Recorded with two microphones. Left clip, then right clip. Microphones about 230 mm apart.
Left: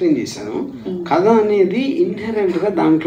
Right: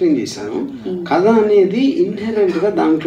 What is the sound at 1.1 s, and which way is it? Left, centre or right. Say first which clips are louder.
A woman's voice: right 1 dB; right.